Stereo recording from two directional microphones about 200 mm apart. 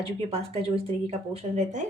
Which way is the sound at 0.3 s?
30° right (ahead or behind).